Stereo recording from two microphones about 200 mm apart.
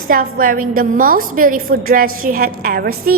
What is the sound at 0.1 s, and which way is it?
A woman's voice, 45° right (ahead or behind).